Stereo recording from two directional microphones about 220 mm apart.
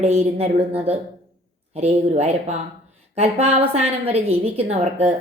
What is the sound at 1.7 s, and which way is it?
A woman's voice, 30° right (ahead or behind).